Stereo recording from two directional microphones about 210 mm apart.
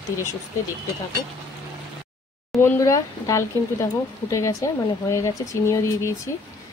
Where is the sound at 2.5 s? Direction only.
15° left (ahead or behind).